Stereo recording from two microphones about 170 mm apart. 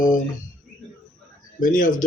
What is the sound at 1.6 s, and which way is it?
Speech, 50° left (ahead or behind).